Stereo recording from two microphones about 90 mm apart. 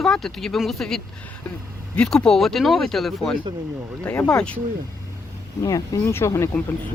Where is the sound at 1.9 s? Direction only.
10° left (ahead or behind).